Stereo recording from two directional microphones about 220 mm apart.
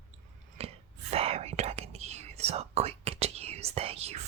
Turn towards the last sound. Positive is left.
turn(degrees=-30)  # may be behind; listen again after turning